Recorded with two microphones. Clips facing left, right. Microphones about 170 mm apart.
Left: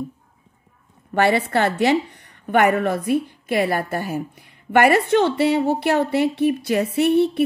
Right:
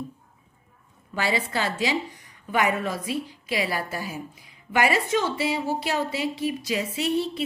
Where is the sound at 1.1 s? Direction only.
60° left (ahead or behind).